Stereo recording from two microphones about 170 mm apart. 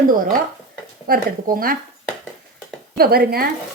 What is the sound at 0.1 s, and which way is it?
Speech, 55° right (ahead or behind).